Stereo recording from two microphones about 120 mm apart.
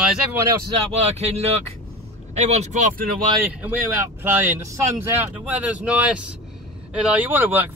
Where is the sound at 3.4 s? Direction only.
15° right (ahead or behind).